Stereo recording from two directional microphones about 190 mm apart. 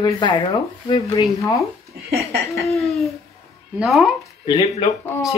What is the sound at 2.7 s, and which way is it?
Speech, centre (ahead or behind).